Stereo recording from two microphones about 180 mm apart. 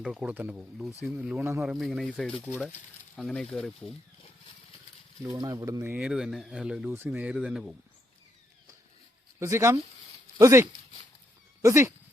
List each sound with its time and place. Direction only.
0.0 s speech: 5° right (ahead or behind)
1.6 s speech: centre (ahead or behind)
5.2 s speech: 20° right (ahead or behind)
9.4 s speech: 15° right (ahead or behind)